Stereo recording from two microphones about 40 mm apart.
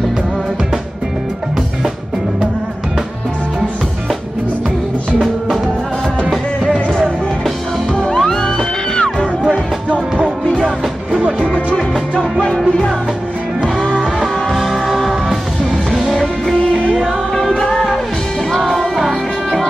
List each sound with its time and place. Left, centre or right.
7.9 s music: centre
11.4 s music: left
14.2 s music: centre
17.4 s music: centre